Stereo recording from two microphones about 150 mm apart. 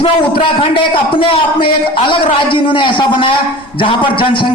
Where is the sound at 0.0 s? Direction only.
35° left (ahead or behind).